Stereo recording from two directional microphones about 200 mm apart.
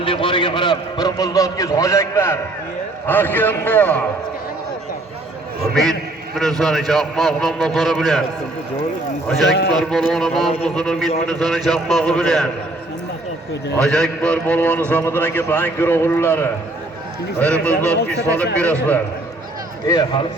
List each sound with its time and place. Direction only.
0.0 s a man's voice: 25° left (ahead or behind); by 4.0 s 10° left (ahead or behind)
5.7 s a man's voice: centre (ahead or behind)
9.5 s speech: 55° left (ahead or behind)
9.7 s a man's voice: centre (ahead or behind)
13.8 s a man's voice: 5° left (ahead or behind)
19.9 s a man's voice: 20° left (ahead or behind)